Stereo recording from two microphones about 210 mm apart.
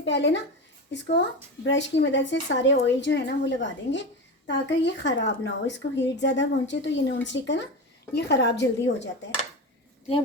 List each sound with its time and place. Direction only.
0.0 s a woman's voice: 55° left (ahead or behind)